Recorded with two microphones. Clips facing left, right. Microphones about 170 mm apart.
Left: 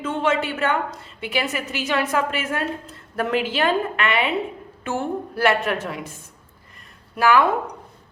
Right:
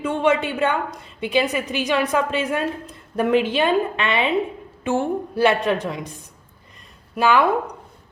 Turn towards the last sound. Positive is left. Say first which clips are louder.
# even
turn(degrees=-20)  # may be behind; listen again after turning